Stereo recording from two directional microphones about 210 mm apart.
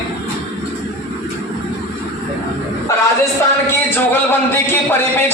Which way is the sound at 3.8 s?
10° left (ahead or behind).